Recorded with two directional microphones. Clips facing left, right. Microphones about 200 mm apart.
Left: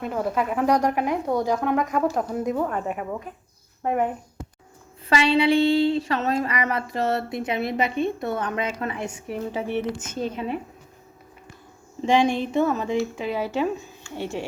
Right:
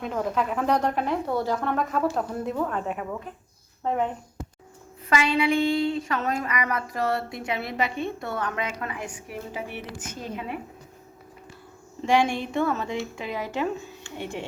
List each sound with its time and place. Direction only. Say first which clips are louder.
0.0 s speech: left 2 dB; 10° left (ahead or behind)
5.0 s speech: left 3 dB; 30° left (ahead or behind)
12.0 s speech: left 3 dB; 20° left (ahead or behind)
13.2 s speech: left 4 dB; 15° right (ahead or behind)